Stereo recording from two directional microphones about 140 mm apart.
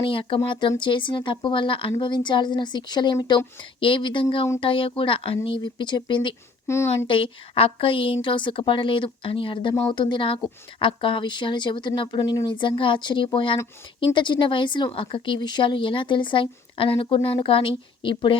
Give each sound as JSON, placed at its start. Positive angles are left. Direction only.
{"t": 0.0, "sound": "a woman's voice", "side_deg": 40}
{"t": 6.7, "sound": "a woman's voice", "side_deg": 20}
{"t": 7.1, "sound": "a woman's voice", "side_deg": 40}